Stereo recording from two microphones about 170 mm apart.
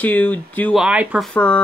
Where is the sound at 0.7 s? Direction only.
5° right (ahead or behind).